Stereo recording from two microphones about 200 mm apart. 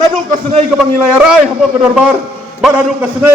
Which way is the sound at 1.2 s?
5° right (ahead or behind).